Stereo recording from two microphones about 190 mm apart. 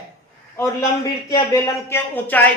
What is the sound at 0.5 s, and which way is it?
A man's voice, 15° left (ahead or behind).